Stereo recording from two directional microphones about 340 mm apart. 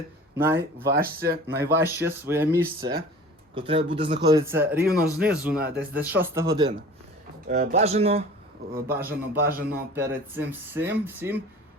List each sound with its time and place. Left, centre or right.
0.3 s speech: centre
0.8 s speech: right
1.6 s speech: centre
4.8 s speech: right
5.1 s speech: centre
5.6 s speech: right
6.1 s speech: centre
7.4 s speech: right
8.9 s speech: centre
9.5 s speech: right
9.9 s speech: centre